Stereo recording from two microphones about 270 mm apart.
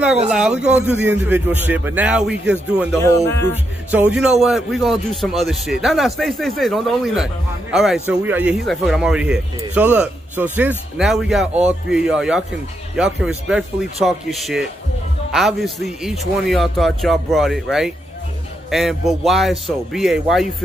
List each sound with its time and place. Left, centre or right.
0.3 s a man's voice: centre
3.0 s speech: centre
3.9 s a man's voice: centre